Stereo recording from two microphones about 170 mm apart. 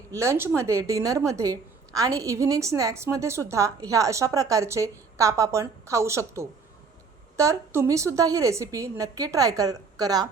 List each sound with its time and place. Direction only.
0.1 s a woman's voice: 15° right (ahead or behind)